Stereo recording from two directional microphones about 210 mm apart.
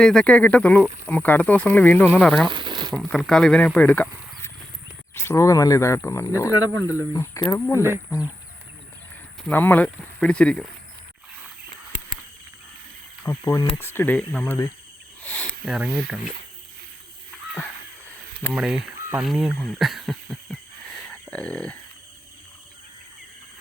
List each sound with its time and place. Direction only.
0.0 s speech: 5° left (ahead or behind)
2.5 s a sound: 20° right (ahead or behind)
2.9 s speech: centre (ahead or behind)
7.8 s speech: 10° right (ahead or behind)
9.5 s speech: 10° left (ahead or behind)
13.2 s speech: 15° left (ahead or behind); by 16.2 s centre (ahead or behind)
18.5 s speech: 5° right (ahead or behind)